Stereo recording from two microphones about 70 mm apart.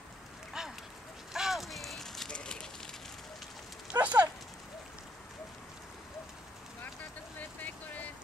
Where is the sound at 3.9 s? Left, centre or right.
Right.